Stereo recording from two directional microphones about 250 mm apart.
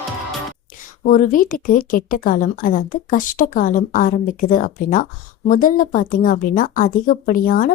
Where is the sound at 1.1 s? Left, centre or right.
Left.